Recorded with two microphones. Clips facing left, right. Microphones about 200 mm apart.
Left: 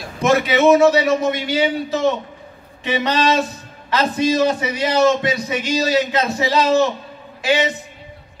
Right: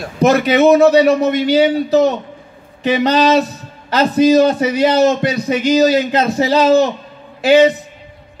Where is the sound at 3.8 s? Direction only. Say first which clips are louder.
Right 7 dB; 35° right (ahead or behind).